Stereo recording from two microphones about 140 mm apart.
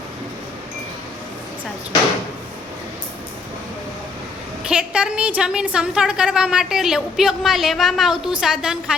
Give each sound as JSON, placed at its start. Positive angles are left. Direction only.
{"t": 4.6, "sound": "a woman's voice", "side_deg": -10}